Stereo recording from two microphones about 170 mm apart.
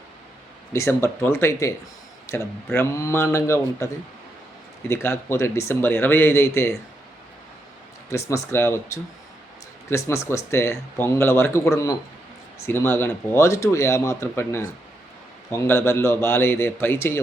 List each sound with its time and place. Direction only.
0.7 s speech: 15° left (ahead or behind)
4.9 s speech: 15° left (ahead or behind)
8.1 s speech: 15° left (ahead or behind)